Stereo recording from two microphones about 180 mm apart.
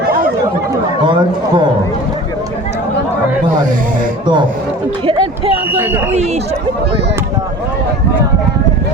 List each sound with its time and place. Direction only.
1.0 s speech: 25° right (ahead or behind)
5.7 s a man's voice: 10° right (ahead or behind)